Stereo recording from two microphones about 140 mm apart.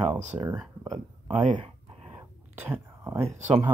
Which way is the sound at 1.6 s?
40° right (ahead or behind).